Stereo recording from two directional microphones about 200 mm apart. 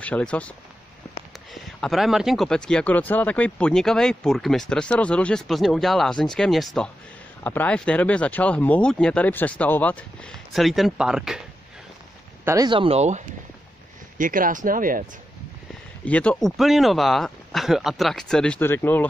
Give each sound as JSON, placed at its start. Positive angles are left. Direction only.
{"t": 0.0, "sound": "speech", "side_deg": 5}
{"t": 1.5, "sound": "speech", "side_deg": 0}
{"t": 12.4, "sound": "speech", "side_deg": -20}
{"t": 16.1, "sound": "speech", "side_deg": 5}